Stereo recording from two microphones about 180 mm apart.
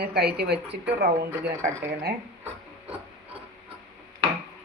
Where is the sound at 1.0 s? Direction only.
45° right (ahead or behind).